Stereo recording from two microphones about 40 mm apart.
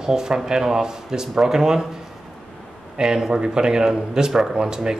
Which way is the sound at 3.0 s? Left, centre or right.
Centre.